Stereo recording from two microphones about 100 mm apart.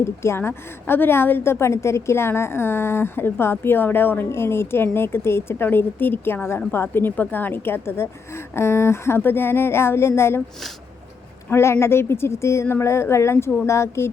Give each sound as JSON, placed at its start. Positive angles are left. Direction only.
{"t": 0.0, "sound": "a woman's voice", "side_deg": 25}
{"t": 11.4, "sound": "a woman's voice", "side_deg": 25}